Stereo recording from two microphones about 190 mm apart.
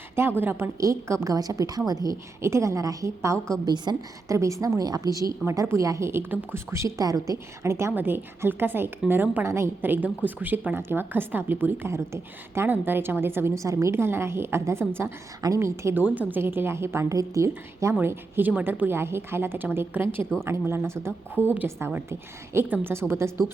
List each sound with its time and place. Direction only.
0.2 s a woman's voice: 10° right (ahead or behind)